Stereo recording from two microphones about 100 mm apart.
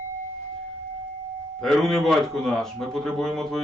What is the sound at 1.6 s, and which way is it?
Speech, centre (ahead or behind).